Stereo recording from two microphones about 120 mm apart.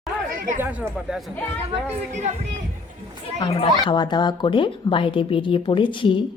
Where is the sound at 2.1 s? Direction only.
70° right (ahead or behind).